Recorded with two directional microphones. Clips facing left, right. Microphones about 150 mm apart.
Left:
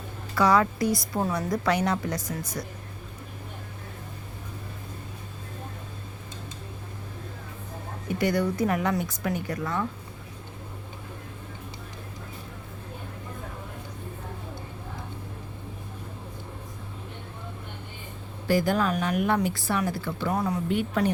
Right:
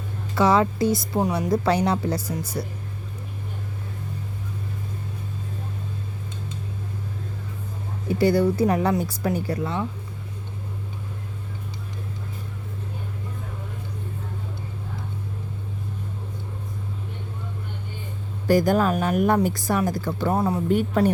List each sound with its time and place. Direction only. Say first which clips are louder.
0.3 s a woman's voice: right 3 dB; 25° right (ahead or behind)
8.0 s a woman's voice: right 6 dB; 30° right (ahead or behind)
18.4 s a woman's voice: right 5 dB; 45° right (ahead or behind)
20.7 s a woman's voice: right 6 dB; 45° right (ahead or behind)